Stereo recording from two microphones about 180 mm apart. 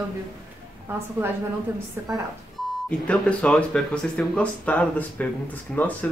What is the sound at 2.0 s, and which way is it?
Speech, 15° right (ahead or behind).